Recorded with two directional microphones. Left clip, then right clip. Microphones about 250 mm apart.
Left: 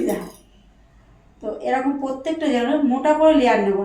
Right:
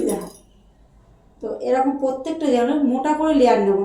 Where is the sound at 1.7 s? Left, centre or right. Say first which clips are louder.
Right 3 dB; centre.